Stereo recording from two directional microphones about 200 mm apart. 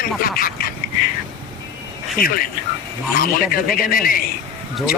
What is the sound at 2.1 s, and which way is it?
Speech, 45° left (ahead or behind).